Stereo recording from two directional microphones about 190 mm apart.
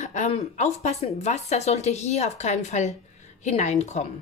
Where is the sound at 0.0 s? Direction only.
40° left (ahead or behind).